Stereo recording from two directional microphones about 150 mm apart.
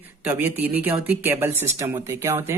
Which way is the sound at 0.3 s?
10° right (ahead or behind).